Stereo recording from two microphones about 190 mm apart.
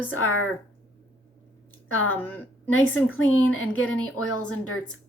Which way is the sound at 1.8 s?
90° left.